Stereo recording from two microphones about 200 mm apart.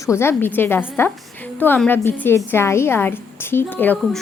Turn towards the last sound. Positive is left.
turn(degrees=10)  # may be behind; listen again after turning